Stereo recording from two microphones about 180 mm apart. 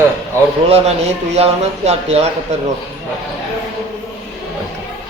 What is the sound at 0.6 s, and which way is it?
Speech, 35° right (ahead or behind).